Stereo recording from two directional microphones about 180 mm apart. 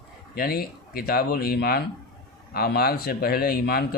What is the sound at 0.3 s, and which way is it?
Speech, 55° left (ahead or behind).